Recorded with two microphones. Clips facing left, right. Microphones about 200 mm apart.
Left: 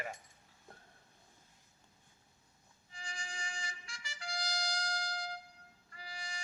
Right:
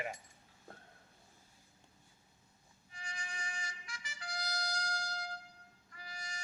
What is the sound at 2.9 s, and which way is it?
Music, 30° left (ahead or behind).